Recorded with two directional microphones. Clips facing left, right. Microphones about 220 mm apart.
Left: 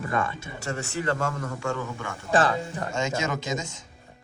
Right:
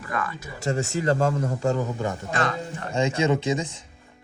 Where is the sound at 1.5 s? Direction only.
40° right (ahead or behind).